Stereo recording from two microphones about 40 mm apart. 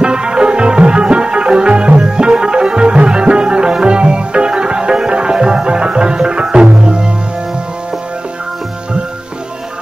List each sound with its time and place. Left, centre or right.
0.0 s music: right